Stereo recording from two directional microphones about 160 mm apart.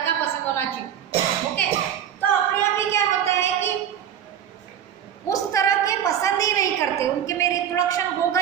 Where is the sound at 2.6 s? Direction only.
15° left (ahead or behind).